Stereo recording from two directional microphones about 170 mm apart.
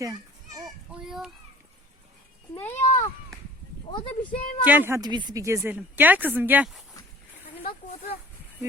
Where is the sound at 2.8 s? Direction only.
45° left (ahead or behind).